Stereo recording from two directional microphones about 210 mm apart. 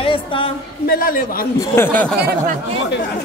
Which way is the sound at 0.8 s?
45° left (ahead or behind).